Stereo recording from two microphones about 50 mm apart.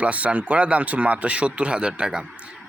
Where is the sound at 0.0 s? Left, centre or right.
Right.